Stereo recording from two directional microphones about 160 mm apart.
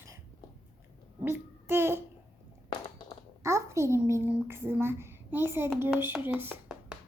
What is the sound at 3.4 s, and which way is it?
A child's voice, 15° right (ahead or behind).